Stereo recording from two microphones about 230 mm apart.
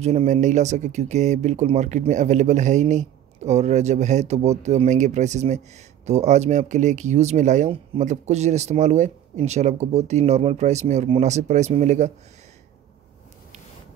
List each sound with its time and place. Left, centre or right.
0.0 s speech: right